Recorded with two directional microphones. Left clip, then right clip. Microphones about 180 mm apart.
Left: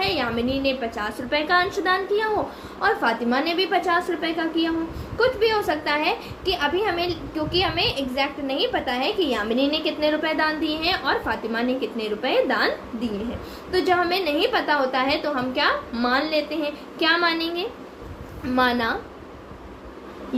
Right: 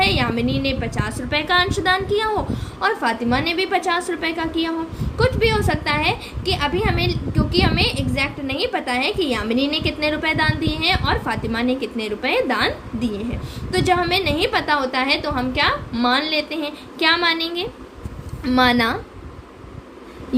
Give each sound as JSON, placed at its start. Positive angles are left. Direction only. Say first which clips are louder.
{"t": 0.0, "sound": "a woman's voice", "louder": "right 4 dB", "side_deg": -30}
{"t": 18.5, "sound": "a woman's voice", "louder": "right 4 dB", "side_deg": -50}